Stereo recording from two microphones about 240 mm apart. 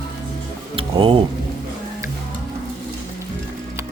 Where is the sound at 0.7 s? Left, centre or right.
Right.